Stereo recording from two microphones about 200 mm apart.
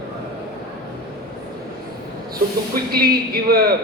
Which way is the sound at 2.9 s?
50° right (ahead or behind).